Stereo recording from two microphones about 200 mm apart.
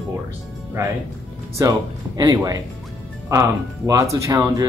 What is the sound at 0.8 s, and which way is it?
Speech, 15° right (ahead or behind).